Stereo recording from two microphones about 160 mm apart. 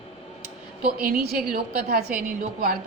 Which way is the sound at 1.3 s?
70° right (ahead or behind).